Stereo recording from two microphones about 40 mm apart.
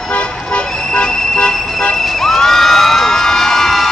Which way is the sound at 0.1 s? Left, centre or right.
Left.